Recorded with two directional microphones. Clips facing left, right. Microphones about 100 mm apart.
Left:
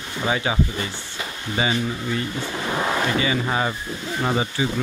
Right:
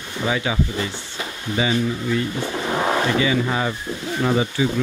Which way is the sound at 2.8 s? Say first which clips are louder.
Right 2 dB; 25° right (ahead or behind).